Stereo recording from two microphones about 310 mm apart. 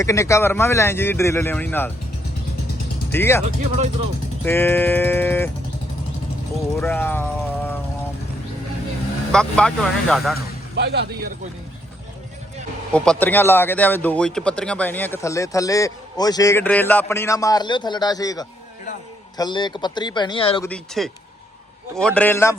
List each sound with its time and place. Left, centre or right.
0.0 s speech: centre
3.1 s speech: centre
4.4 s speech: centre
6.7 s speech: centre
9.3 s speech: centre
10.8 s speech: right
12.9 s speech: centre
20.6 s speech: centre